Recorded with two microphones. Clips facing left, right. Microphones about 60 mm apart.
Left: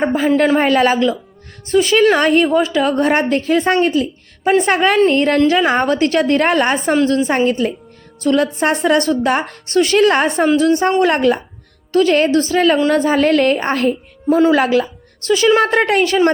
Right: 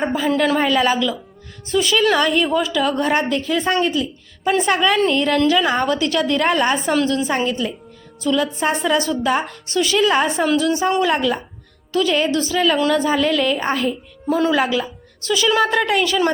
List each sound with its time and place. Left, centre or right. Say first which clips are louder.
0.0 s a woman's voice: left 4 dB; left
10.6 s a woman's voice: left 5 dB; left
14.3 s a woman's voice: left 6 dB; left
14.5 s a woman's voice: left 5 dB; left
15.3 s a woman's voice: left 4 dB; left